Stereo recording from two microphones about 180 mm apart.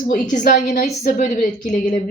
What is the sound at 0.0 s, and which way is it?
A woman's voice, 45° left (ahead or behind).